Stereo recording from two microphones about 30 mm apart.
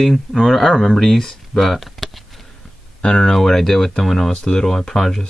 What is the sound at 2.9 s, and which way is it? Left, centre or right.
Speech, left.